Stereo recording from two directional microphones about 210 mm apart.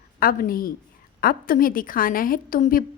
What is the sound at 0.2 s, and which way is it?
A woman's voice, 45° left (ahead or behind).